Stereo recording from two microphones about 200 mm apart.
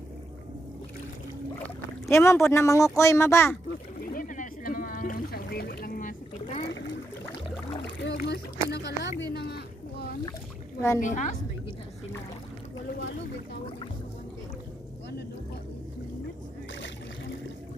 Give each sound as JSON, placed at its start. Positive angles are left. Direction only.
{"t": 2.0, "sound": "speech", "side_deg": 15}
{"t": 4.0, "sound": "boat", "side_deg": 45}
{"t": 6.7, "sound": "boat", "side_deg": 65}
{"t": 7.8, "sound": "rowboat", "side_deg": 60}
{"t": 9.2, "sound": "a sound", "side_deg": 55}
{"t": 11.0, "sound": "a woman's voice", "side_deg": 40}